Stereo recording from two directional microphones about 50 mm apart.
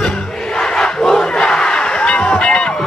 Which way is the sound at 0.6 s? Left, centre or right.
Centre.